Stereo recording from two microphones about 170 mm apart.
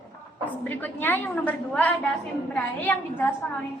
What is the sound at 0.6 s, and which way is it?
A woman's voice, 10° left (ahead or behind).